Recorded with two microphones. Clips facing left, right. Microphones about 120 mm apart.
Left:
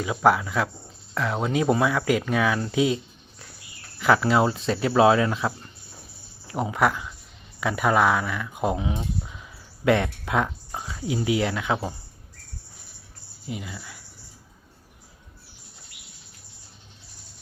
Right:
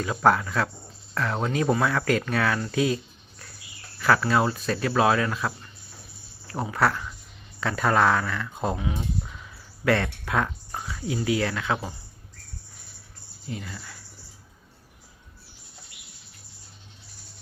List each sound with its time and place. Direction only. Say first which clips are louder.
0.0 s speech: left 1 dB; 10° left (ahead or behind)
2.6 s a sound: left 2 dB; 20° left (ahead or behind)
4.0 s speech: left 2 dB; 20° left (ahead or behind)
13.5 s speech: left 1 dB; 10° left (ahead or behind)